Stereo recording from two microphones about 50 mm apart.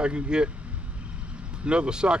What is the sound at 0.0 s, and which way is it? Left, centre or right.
Speech, right.